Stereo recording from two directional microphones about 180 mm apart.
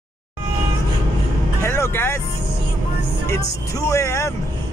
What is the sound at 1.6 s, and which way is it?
Vehicle, 15° left (ahead or behind).